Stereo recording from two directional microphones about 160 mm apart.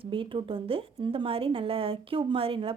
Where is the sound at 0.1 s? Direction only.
35° right (ahead or behind).